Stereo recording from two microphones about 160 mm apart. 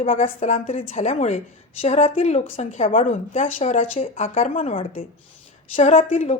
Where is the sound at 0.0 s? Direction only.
40° left (ahead or behind).